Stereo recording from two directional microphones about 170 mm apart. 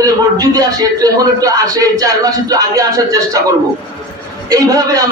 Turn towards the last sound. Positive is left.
turn(degrees=-20)  # may be behind; listen again after turning